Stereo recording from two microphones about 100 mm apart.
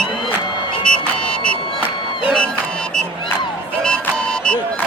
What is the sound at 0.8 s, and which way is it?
Music, 10° left (ahead or behind).